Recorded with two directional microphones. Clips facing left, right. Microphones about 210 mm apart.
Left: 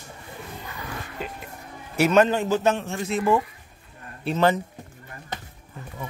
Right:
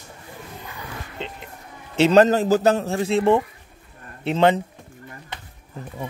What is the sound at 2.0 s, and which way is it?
A man's voice, 35° right (ahead or behind).